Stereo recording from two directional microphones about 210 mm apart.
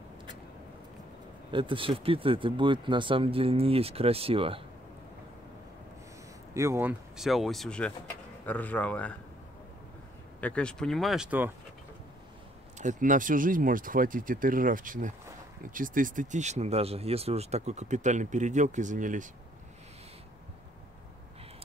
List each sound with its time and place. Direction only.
1.5 s speech: 25° right (ahead or behind)
6.5 s speech: 15° right (ahead or behind); by 9.1 s 5° left (ahead or behind)
10.4 s speech: 5° left (ahead or behind)
12.7 s speech: 35° right (ahead or behind)